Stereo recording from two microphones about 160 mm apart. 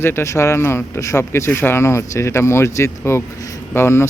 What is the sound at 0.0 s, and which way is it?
Speech, 15° left (ahead or behind).